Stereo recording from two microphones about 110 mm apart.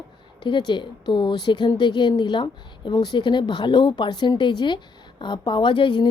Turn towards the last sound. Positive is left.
turn(degrees=45)  # may be behind; listen again after turning